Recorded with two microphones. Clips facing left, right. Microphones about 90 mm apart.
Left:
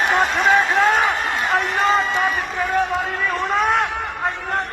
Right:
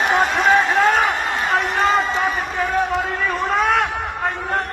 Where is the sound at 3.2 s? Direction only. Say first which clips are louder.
Even; centre (ahead or behind).